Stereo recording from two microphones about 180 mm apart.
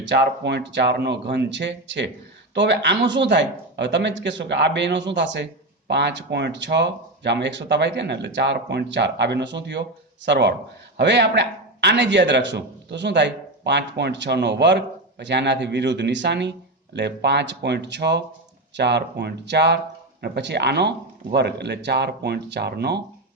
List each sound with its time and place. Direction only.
0.0 s a man's voice: 75° right (ahead or behind)